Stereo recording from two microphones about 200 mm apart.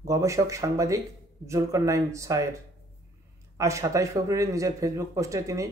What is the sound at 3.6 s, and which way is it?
Speech, 15° right (ahead or behind).